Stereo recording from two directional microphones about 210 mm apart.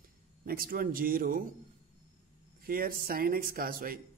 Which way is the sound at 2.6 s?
45° right (ahead or behind).